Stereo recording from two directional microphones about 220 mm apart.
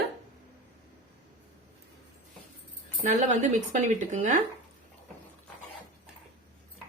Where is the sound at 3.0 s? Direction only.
35° right (ahead or behind).